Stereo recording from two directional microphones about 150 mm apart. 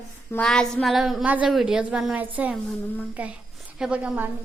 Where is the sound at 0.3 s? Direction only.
5° left (ahead or behind).